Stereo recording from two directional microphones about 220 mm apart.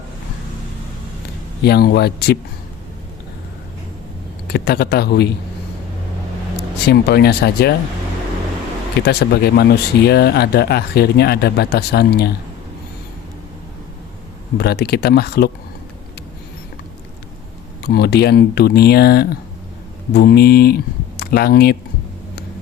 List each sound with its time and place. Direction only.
1.6 s speech: 45° left (ahead or behind)
4.4 s speech: 45° left (ahead or behind)
6.8 s speech: 45° left (ahead or behind)
9.0 s speech: 45° left (ahead or behind)
14.6 s speech: 50° left (ahead or behind)
17.8 s speech: 45° left (ahead or behind)